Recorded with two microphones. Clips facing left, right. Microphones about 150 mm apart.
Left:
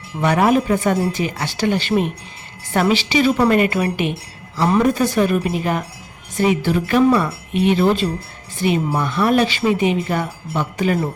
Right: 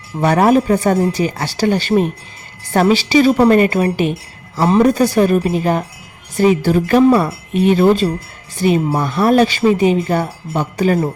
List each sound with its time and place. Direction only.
0.2 s speech: 40° right (ahead or behind)